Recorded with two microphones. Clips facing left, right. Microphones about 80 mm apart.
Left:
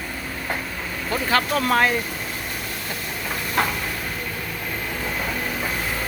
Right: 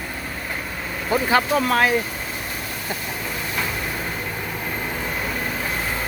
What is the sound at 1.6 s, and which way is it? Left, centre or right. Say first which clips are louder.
Speech: even; centre.